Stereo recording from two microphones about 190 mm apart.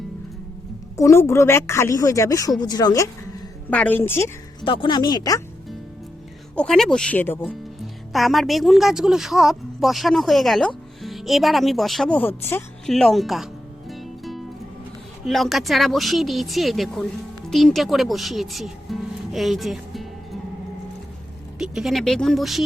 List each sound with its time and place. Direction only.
0.9 s a woman's voice: 15° left (ahead or behind)
3.7 s a woman's voice: 10° left (ahead or behind)
4.6 s speech: 25° left (ahead or behind)
6.6 s a woman's voice: centre (ahead or behind)
8.1 s a woman's voice: centre (ahead or behind)
12.9 s music: centre (ahead or behind)
15.3 s speech: centre (ahead or behind)
21.6 s a woman's voice: centre (ahead or behind)